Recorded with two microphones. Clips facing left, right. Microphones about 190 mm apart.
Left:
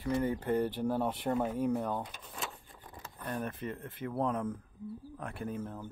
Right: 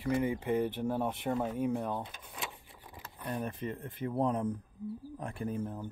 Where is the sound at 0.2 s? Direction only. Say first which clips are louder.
Even; 10° right (ahead or behind).